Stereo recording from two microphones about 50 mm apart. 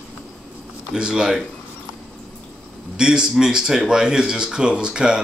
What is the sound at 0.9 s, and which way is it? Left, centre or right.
Speech, centre.